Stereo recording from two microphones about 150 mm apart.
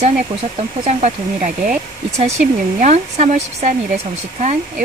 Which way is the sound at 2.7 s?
50° right (ahead or behind).